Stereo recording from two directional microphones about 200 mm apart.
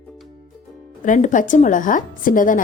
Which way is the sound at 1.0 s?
40° left (ahead or behind).